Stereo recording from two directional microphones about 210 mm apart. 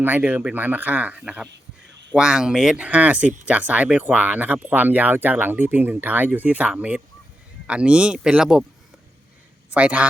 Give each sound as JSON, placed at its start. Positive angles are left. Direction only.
{"t": 0.0, "sound": "speech", "side_deg": -5}
{"t": 9.6, "sound": "speech", "side_deg": -5}